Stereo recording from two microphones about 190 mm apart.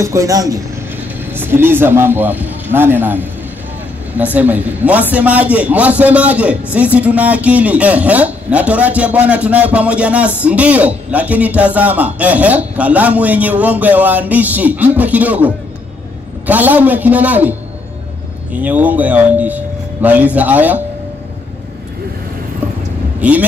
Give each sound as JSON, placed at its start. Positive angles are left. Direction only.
{"t": 0.0, "sound": "a man's voice", "side_deg": -15}
{"t": 23.2, "sound": "a man's voice", "side_deg": -10}